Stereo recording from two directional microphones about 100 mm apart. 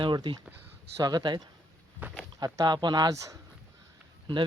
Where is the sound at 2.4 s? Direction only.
40° right (ahead or behind).